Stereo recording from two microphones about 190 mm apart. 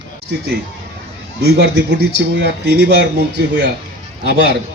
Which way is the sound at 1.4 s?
60° right (ahead or behind).